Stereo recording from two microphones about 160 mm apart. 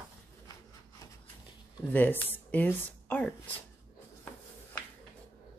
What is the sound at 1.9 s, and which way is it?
Speech, 10° left (ahead or behind).